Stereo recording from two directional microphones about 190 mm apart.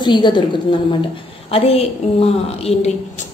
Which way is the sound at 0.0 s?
25° left (ahead or behind).